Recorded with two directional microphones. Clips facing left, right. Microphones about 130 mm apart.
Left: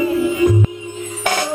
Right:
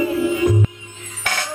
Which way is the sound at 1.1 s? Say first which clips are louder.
Left 6 dB; 15° left (ahead or behind).